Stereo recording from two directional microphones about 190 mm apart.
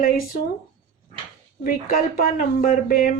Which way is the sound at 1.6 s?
45° left (ahead or behind).